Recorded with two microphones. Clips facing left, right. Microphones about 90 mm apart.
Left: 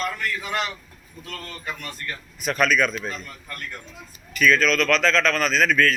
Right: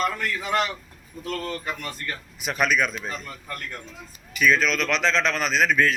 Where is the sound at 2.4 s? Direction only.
15° right (ahead or behind).